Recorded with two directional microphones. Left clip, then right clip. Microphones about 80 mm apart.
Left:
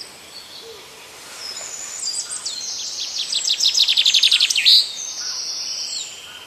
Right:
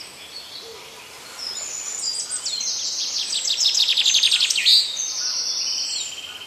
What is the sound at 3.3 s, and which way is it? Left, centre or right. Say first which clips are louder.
Bird vocalization: left 3 dB; centre.